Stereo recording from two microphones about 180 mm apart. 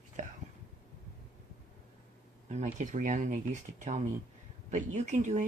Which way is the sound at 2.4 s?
40° right (ahead or behind).